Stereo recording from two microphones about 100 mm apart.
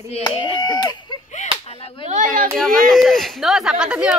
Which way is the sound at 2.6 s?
5° left (ahead or behind).